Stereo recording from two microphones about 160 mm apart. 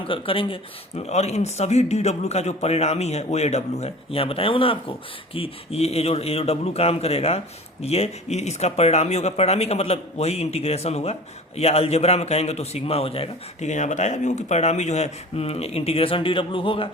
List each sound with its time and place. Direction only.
0.0 s speech: 35° left (ahead or behind)